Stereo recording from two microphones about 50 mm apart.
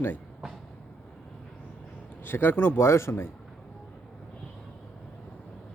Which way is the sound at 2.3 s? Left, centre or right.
Left.